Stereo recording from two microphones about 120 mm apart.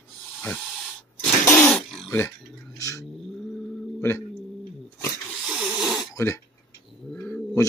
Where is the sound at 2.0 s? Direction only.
25° left (ahead or behind).